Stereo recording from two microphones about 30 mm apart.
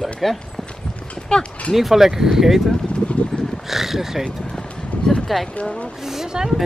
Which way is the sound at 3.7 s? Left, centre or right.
Centre.